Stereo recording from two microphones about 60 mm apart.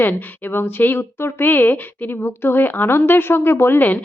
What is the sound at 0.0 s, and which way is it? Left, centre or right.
A woman's voice, left.